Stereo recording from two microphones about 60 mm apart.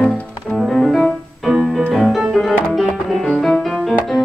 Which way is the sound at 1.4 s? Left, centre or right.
Centre.